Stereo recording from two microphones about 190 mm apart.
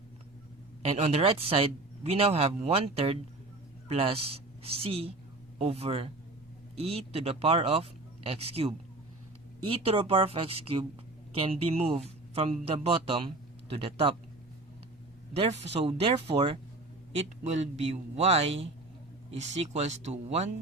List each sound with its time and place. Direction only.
0.8 s speech: 35° right (ahead or behind)
15.3 s speech: 35° right (ahead or behind)